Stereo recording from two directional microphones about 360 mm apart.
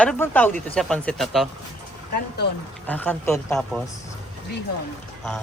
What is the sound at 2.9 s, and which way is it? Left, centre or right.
Speech, centre.